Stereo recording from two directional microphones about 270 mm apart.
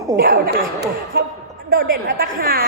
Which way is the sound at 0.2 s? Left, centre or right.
Right.